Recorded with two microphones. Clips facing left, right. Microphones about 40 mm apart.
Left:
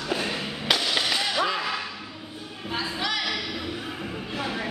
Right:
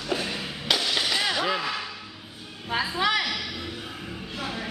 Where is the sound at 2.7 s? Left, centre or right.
Right.